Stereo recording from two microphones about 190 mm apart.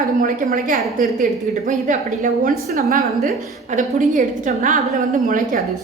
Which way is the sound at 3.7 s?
40° right (ahead or behind).